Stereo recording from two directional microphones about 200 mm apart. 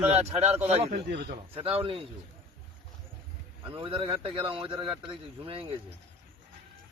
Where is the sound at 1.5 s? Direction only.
30° right (ahead or behind).